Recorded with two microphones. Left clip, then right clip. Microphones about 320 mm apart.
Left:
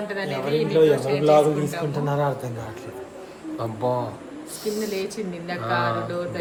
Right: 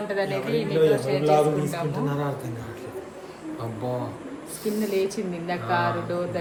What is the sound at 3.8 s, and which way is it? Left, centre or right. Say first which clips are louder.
Speech: left 6 dB; centre.